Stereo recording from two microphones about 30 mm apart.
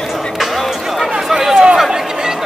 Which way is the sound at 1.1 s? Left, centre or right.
Centre.